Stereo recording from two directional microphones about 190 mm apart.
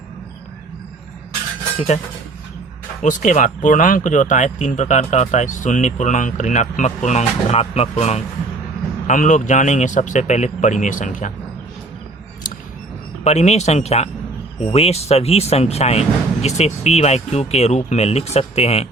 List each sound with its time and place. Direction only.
3.0 s speech: 40° left (ahead or behind)
13.2 s speech: 35° left (ahead or behind)